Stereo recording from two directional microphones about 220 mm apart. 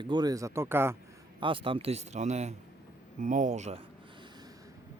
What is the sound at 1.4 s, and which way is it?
A man's voice, 25° right (ahead or behind).